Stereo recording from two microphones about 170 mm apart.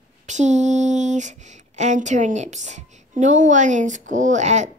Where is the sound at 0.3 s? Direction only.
45° right (ahead or behind).